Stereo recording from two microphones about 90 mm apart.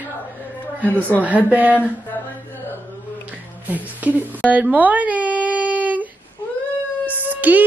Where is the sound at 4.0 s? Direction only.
20° right (ahead or behind).